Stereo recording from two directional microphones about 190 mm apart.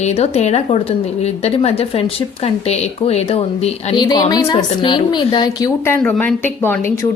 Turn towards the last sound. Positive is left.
turn(degrees=15)  # may be behind; listen again after turning